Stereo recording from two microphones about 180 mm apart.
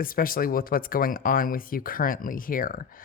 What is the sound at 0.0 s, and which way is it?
Speech, 50° left (ahead or behind).